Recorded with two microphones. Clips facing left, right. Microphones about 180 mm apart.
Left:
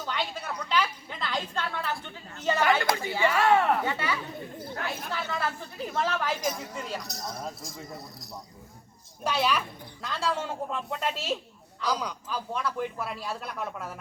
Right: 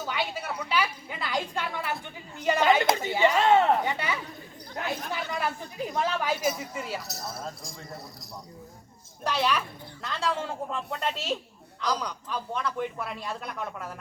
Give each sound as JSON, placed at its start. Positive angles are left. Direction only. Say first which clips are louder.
{"t": 0.0, "sound": "a woman's voice", "louder": "right 1 dB", "side_deg": -10}
{"t": 9.2, "sound": "speech", "louder": "even", "side_deg": 5}